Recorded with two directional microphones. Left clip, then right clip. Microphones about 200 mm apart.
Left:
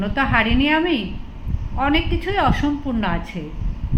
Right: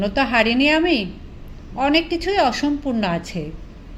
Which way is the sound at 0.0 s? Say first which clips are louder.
Right 1 dB; 35° right (ahead or behind).